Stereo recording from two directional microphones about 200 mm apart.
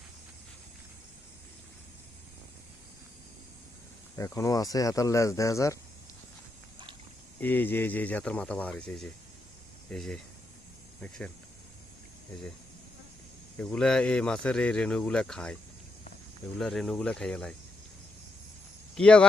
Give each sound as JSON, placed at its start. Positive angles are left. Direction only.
{"t": 4.2, "sound": "speech", "side_deg": 15}
{"t": 7.3, "sound": "speech", "side_deg": 10}
{"t": 13.6, "sound": "speech", "side_deg": 5}
{"t": 16.6, "sound": "speech", "side_deg": 0}
{"t": 18.9, "sound": "speech", "side_deg": 5}